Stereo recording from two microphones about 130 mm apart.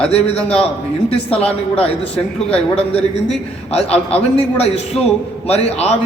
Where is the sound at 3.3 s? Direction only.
50° left (ahead or behind).